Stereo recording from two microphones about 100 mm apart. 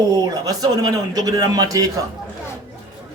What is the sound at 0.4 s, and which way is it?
A man's voice, 40° right (ahead or behind).